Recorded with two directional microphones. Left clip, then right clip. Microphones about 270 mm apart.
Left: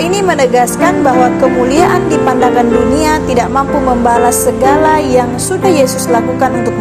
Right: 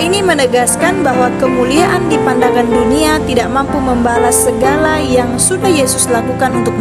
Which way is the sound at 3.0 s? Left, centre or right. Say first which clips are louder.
Left 1 dB; right.